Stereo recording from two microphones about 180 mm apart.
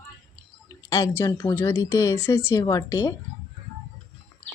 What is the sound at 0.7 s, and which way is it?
Speech, 15° left (ahead or behind).